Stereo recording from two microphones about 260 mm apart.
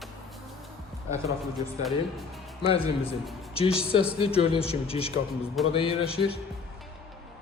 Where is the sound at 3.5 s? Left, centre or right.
Left.